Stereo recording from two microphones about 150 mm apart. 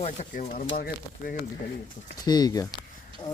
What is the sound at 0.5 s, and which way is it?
Speech, 75° left (ahead or behind).